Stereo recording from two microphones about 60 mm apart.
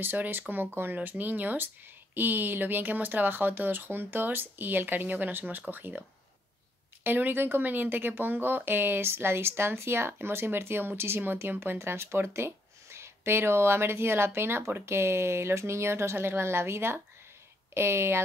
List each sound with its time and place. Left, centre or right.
0.0 s speech: right